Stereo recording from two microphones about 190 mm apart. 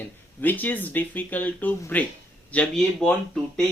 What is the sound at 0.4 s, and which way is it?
Speech, 10° left (ahead or behind).